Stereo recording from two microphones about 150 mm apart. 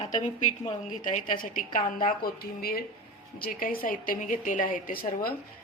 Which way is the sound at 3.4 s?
75° left (ahead or behind).